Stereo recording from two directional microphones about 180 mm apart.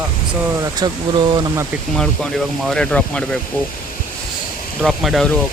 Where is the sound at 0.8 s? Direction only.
25° right (ahead or behind).